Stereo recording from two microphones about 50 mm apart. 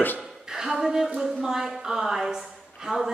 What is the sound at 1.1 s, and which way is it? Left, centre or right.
A woman's voice, centre.